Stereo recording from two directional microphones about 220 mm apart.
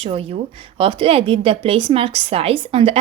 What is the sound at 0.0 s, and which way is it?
A woman's voice, 25° right (ahead or behind).